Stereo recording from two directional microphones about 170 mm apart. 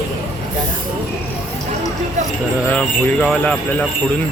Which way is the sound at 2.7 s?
10° left (ahead or behind).